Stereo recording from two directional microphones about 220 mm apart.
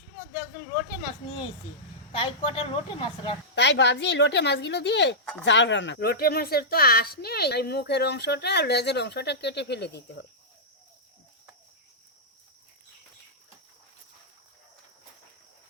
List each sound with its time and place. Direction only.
2.1 s a woman's voice: 25° left (ahead or behind)
3.5 s speech: 50° left (ahead or behind)